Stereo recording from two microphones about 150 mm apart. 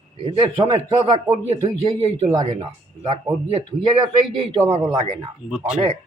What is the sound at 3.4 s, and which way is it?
Speech, 40° right (ahead or behind).